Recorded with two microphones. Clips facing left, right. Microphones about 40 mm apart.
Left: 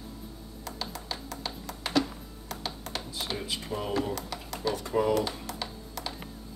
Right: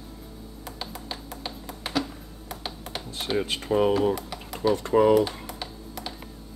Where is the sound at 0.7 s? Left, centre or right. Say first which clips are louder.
Even; centre.